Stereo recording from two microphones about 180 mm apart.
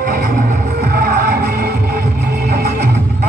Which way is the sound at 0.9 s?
55° right (ahead or behind).